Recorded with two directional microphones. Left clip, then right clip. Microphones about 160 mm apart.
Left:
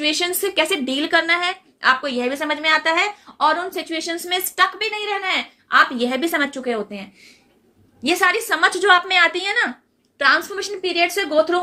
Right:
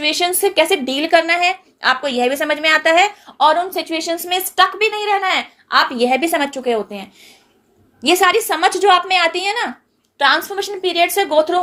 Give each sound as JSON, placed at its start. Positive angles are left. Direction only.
{"t": 0.0, "sound": "a woman's voice", "side_deg": -20}
{"t": 4.8, "sound": "a woman's voice", "side_deg": -35}
{"t": 8.0, "sound": "a woman's voice", "side_deg": -30}
{"t": 10.2, "sound": "a woman's voice", "side_deg": -30}